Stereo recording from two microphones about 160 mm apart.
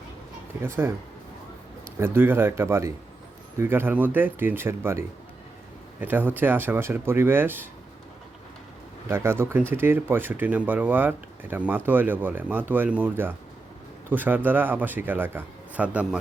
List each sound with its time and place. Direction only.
0.6 s speech: 15° right (ahead or behind)
2.1 s speech: 15° right (ahead or behind)
9.0 s speech: 15° right (ahead or behind)